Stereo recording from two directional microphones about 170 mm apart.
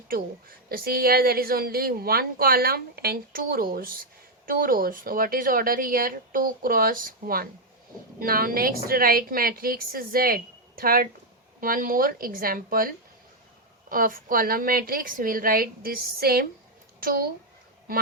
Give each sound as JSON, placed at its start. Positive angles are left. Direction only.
{"t": 0.1, "sound": "a woman's voice", "side_deg": -60}
{"t": 13.9, "sound": "a woman's voice", "side_deg": -55}